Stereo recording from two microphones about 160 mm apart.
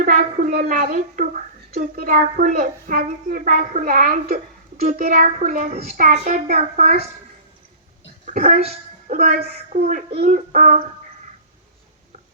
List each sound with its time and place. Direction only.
0.0 s a woman's voice: 60° right (ahead or behind)
4.8 s a child's voice: 50° right (ahead or behind)
8.2 s speech: 55° right (ahead or behind)
9.4 s a child's voice: 45° right (ahead or behind)